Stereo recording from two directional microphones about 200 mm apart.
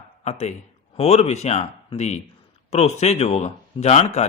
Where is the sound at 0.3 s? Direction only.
35° left (ahead or behind).